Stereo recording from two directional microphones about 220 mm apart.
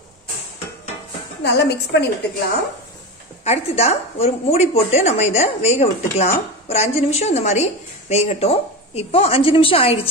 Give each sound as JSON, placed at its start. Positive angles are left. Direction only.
{"t": 1.4, "sound": "a woman's voice", "side_deg": 50}
{"t": 3.4, "sound": "a woman's voice", "side_deg": 30}